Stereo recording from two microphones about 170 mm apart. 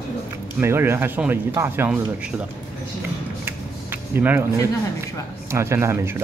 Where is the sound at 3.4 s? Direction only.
10° right (ahead or behind).